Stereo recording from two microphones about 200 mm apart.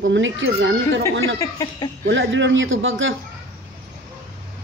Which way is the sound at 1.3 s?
15° left (ahead or behind).